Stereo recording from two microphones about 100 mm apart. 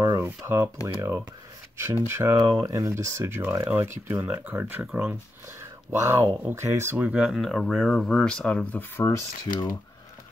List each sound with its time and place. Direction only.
0.4 s speech: 30° right (ahead or behind)
2.3 s speech: 40° right (ahead or behind)
7.0 s speech: 5° right (ahead or behind)
8.7 s speech: 25° left (ahead or behind)